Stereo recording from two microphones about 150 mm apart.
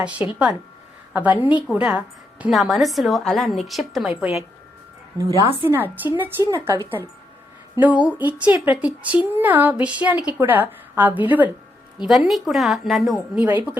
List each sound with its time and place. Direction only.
0.2 s a woman's voice: 15° right (ahead or behind)
5.2 s a woman's voice: 15° left (ahead or behind)
5.6 s a woman's voice: 15° right (ahead or behind)
12.0 s a woman's voice: centre (ahead or behind)